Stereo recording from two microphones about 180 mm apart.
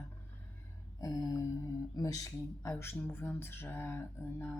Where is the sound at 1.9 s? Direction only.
20° left (ahead or behind).